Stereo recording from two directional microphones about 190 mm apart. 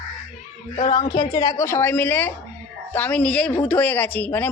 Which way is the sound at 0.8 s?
25° left (ahead or behind).